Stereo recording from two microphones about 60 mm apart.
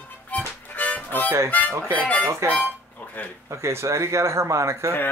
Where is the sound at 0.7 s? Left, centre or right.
Left.